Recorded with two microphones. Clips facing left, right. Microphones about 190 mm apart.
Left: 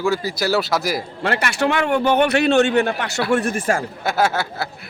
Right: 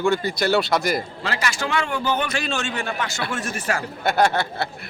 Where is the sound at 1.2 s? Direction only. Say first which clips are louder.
Left 8 dB; 60° left (ahead or behind).